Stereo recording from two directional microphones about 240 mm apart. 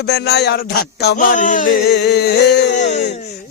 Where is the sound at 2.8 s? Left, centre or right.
Left.